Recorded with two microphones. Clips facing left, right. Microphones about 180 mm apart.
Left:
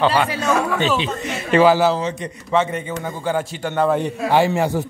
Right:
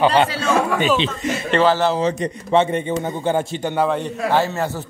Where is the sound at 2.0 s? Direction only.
35° right (ahead or behind).